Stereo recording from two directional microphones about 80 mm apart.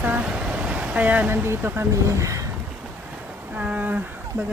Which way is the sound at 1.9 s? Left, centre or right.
Right.